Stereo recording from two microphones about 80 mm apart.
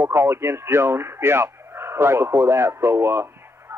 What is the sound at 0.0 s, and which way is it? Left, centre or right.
Speech, right.